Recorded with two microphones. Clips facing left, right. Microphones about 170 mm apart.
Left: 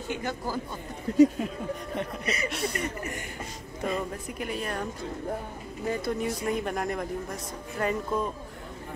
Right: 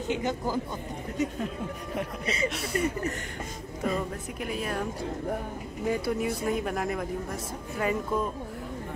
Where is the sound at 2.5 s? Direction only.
Centre (ahead or behind).